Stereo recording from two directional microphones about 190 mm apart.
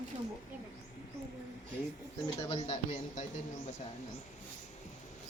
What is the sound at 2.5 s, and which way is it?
Speech, 35° left (ahead or behind).